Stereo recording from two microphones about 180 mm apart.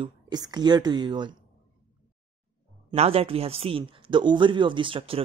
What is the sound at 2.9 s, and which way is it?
Speech, 35° right (ahead or behind).